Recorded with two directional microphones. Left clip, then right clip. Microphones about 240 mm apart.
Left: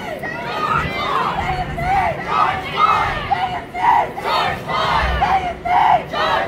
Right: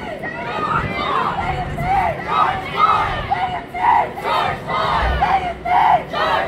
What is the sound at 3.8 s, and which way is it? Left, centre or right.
Battle cry, centre.